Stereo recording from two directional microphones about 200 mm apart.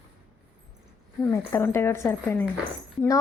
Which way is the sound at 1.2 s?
15° left (ahead or behind).